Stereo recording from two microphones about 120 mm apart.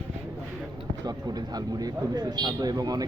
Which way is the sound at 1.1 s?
35° right (ahead or behind).